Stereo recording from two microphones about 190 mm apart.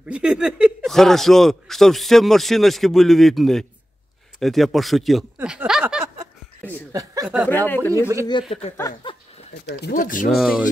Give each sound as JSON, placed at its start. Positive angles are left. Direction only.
{"t": 0.0, "sound": "speech", "side_deg": -5}
{"t": 6.7, "sound": "speech", "side_deg": -20}
{"t": 7.4, "sound": "speech", "side_deg": 10}
{"t": 8.3, "sound": "speech", "side_deg": 25}
{"t": 9.5, "sound": "speech", "side_deg": 60}
{"t": 10.3, "sound": "speech", "side_deg": 0}